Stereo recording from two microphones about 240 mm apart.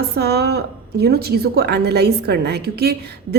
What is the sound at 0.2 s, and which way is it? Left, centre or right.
A woman's voice, right.